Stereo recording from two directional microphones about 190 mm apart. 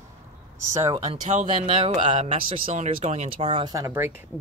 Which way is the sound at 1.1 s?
35° right (ahead or behind).